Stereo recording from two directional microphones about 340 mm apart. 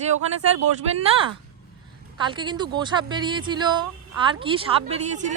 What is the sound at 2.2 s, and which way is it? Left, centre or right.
Speech, centre.